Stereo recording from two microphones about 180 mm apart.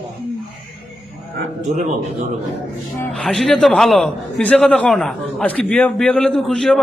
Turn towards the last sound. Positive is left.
turn(degrees=0)  # may be behind; listen again after turning